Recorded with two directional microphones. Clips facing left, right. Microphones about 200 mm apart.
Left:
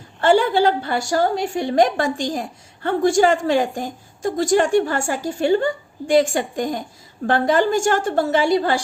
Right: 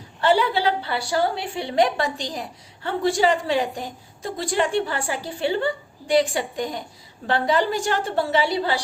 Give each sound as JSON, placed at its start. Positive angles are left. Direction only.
{"t": 0.2, "sound": "a woman's voice", "side_deg": 50}